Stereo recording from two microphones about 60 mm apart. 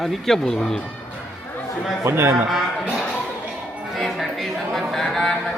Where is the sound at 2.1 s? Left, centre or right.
Right.